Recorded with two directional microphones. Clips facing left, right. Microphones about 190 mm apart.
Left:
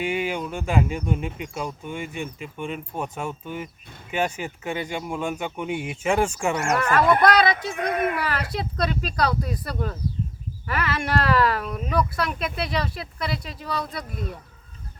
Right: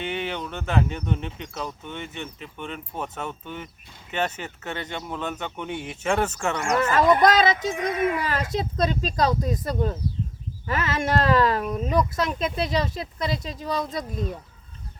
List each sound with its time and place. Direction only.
0.0 s speech: 10° left (ahead or behind)
6.7 s speech: 20° right (ahead or behind)